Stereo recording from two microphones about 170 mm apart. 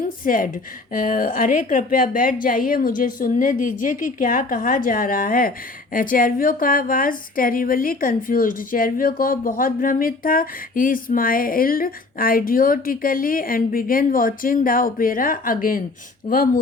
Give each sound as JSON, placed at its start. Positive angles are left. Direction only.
{"t": 0.2, "sound": "a woman's voice", "side_deg": 50}